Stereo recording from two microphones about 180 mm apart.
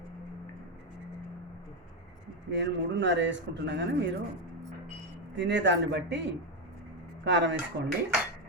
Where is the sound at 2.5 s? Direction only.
80° right.